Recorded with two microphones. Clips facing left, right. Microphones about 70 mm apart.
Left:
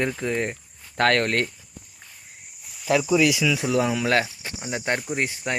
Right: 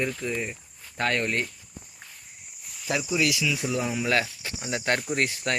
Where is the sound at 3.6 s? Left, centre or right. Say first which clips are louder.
Left 5 dB; left.